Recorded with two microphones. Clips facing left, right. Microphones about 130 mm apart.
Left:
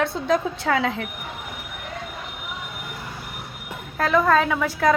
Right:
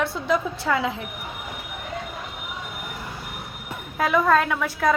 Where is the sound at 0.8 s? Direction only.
70° left (ahead or behind).